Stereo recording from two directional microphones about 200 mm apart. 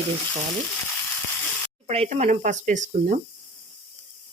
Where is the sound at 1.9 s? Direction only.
35° right (ahead or behind).